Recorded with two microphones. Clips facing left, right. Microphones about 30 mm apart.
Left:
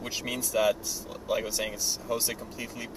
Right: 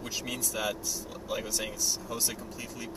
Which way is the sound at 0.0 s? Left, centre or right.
Centre.